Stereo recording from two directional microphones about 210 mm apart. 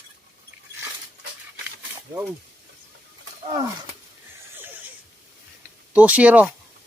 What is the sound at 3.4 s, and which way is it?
Wild animals, 15° right (ahead or behind).